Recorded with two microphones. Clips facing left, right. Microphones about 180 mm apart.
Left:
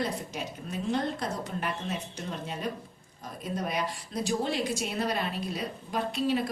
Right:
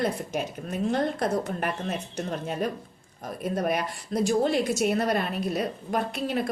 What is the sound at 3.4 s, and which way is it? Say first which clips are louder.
A woman's voice: right 5 dB; 55° right (ahead or behind).